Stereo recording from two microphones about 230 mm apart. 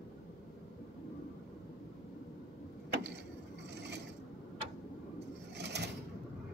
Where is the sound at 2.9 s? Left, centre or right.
Right.